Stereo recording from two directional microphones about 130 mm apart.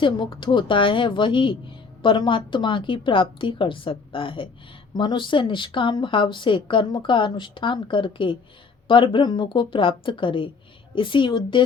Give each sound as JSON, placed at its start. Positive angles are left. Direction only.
{"t": 0.0, "sound": "speech", "side_deg": 40}